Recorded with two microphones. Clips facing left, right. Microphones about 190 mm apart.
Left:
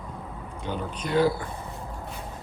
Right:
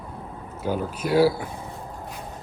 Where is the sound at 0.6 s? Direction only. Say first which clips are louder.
Right 6 dB; 5° right (ahead or behind).